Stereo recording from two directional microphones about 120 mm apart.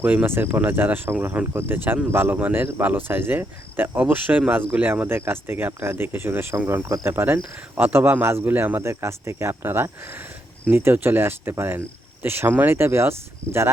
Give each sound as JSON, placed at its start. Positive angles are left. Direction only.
{"t": 0.0, "sound": "speech", "side_deg": -15}